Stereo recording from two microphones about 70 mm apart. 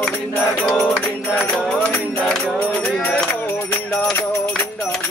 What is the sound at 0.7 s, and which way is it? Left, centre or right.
Music, centre.